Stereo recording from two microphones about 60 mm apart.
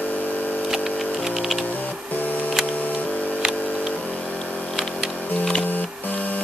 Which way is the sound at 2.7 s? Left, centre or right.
Left.